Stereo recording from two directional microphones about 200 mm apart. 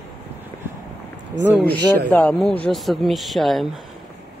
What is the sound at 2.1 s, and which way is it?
Speech, 5° left (ahead or behind).